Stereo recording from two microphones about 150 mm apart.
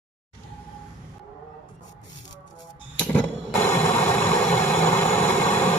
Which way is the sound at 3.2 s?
10° left (ahead or behind).